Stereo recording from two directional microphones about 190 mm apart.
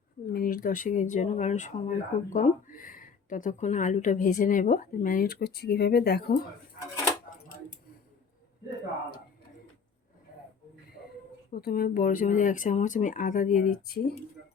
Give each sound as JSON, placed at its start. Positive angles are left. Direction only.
{"t": 0.3, "sound": "speech", "side_deg": 50}
{"t": 11.5, "sound": "speech", "side_deg": 50}